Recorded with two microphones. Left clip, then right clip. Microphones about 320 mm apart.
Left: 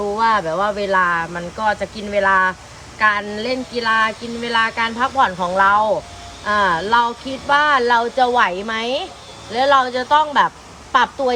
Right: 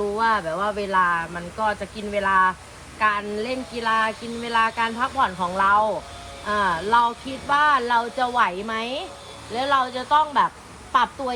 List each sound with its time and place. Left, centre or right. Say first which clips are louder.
0.2 s speech: left 6 dB; left